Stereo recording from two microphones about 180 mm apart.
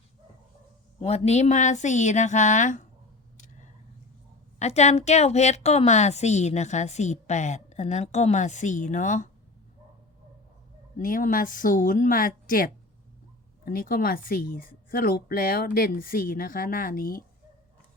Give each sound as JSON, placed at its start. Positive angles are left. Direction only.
{"t": 1.0, "sound": "a woman's voice", "side_deg": 35}
{"t": 4.6, "sound": "a woman's voice", "side_deg": 35}
{"t": 10.9, "sound": "speech", "side_deg": 50}